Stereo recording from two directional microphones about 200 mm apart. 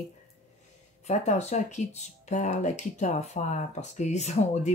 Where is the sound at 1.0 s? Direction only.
35° left (ahead or behind).